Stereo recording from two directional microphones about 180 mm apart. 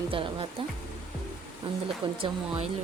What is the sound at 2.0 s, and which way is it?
Speech, 30° right (ahead or behind).